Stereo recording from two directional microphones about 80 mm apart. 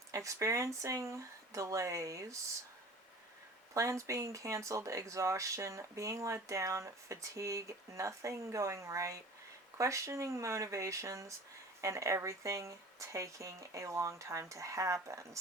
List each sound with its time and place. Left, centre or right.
0.1 s speech: right
3.8 s speech: right